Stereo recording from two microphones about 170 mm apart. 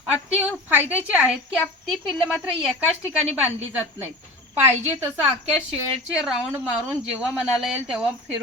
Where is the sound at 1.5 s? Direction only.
10° left (ahead or behind).